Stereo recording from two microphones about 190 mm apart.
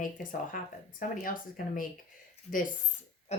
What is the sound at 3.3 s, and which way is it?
Pig, 35° left (ahead or behind).